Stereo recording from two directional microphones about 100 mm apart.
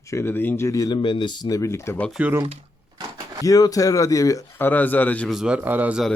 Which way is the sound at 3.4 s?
35° left (ahead or behind).